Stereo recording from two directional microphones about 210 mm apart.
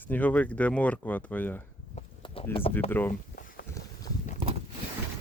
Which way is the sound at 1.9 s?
25° left (ahead or behind).